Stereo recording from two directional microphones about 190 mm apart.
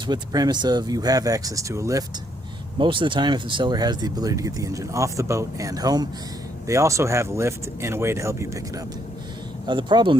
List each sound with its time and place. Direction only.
0.1 s speech: 20° right (ahead or behind)